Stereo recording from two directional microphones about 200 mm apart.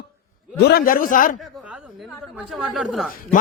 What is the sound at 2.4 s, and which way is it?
Speech, centre (ahead or behind).